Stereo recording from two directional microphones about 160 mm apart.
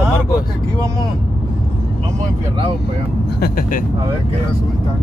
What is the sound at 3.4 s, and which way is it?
Speech, 65° left (ahead or behind).